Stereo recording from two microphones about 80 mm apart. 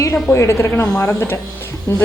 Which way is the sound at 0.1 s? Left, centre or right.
Left.